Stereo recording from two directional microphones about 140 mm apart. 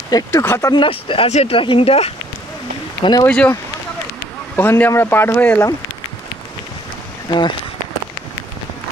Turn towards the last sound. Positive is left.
turn(degrees=30)  # may be behind; listen again after turning